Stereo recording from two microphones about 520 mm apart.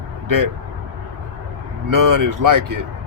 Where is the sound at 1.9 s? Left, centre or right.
Right.